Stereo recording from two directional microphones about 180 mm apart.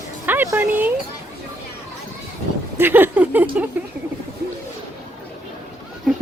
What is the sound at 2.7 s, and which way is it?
Speech, 10° right (ahead or behind).